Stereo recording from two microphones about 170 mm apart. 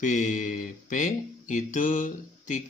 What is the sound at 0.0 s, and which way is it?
Speech, 45° left (ahead or behind).